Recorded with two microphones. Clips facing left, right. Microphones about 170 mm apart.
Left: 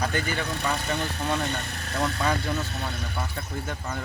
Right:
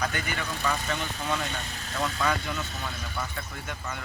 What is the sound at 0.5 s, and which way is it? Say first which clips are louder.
Speech: right 1 dB; 65° left (ahead or behind).